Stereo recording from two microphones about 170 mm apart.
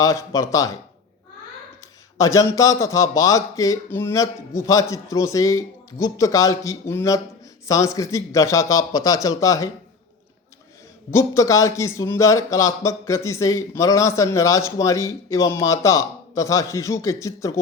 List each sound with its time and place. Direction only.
0.0 s a man's voice: 20° left (ahead or behind)
2.1 s a man's voice: 20° left (ahead or behind)
11.1 s speech: 20° left (ahead or behind)